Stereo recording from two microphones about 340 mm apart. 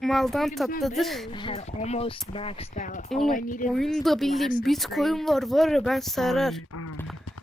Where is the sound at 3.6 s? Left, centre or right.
Centre.